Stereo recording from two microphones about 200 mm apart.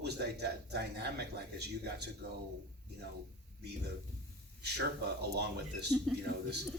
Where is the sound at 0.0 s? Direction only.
55° right (ahead or behind).